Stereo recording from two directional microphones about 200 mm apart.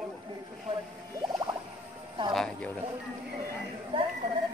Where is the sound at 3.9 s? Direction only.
25° right (ahead or behind).